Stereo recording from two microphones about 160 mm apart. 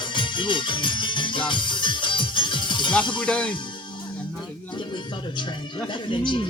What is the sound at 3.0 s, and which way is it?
Speech, 30° left (ahead or behind).